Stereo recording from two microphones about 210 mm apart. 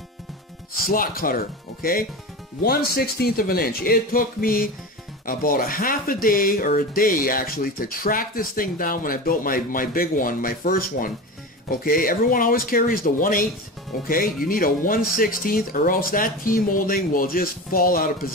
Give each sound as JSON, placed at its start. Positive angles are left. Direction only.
{"t": 0.8, "sound": "speech", "side_deg": 45}